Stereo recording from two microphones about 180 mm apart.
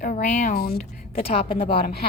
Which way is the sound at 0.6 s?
55° left (ahead or behind).